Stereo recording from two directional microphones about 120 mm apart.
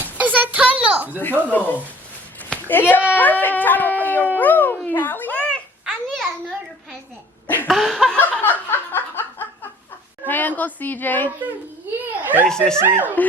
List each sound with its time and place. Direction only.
0.0 s a sound: 15° right (ahead or behind)
1.2 s speech: 15° left (ahead or behind)
2.5 s a sound: 15° left (ahead or behind)
3.1 s speech: 15° left (ahead or behind)
4.4 s music: 15° left (ahead or behind)
5.8 s babbling: centre (ahead or behind)
7.4 s a sound: 15° left (ahead or behind)
7.7 s laughter: centre (ahead or behind)
8.2 s a sound: 15° left (ahead or behind)
10.2 s speech: 15° left (ahead or behind)
12.2 s speech: 15° right (ahead or behind)
12.5 s speech: 5° left (ahead or behind)